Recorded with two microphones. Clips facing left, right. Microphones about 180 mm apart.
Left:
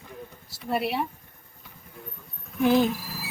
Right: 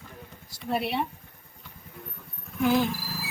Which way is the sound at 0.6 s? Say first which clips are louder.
Left 1 dB; centre (ahead or behind).